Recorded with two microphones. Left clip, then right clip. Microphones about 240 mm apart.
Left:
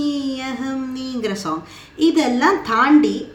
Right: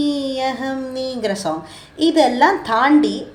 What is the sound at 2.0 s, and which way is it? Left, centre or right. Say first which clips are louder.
Speech: right 3 dB; centre.